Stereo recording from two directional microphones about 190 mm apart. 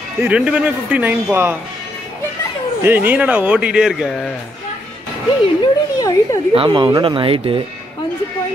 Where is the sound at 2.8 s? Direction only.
10° right (ahead or behind).